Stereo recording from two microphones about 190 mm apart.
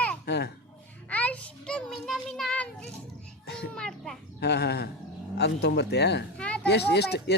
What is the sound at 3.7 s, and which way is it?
Children playing, centre (ahead or behind).